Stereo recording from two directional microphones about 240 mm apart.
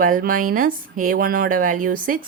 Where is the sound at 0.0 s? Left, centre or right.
Right.